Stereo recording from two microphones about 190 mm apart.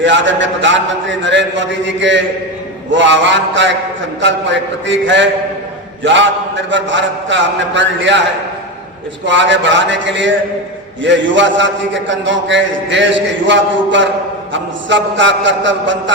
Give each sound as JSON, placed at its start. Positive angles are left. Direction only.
{"t": 0.0, "sound": "a man's voice", "side_deg": -75}
{"t": 9.2, "sound": "a man's voice", "side_deg": -70}